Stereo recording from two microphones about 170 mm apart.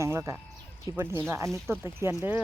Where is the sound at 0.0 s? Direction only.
15° right (ahead or behind).